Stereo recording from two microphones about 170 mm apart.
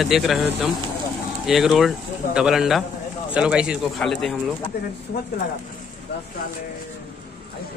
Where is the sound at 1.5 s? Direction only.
Centre (ahead or behind).